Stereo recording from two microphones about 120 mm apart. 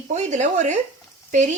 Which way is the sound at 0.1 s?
75° right (ahead or behind).